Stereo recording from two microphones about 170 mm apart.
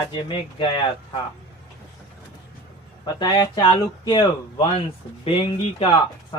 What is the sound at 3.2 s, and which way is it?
Speech, 25° left (ahead or behind).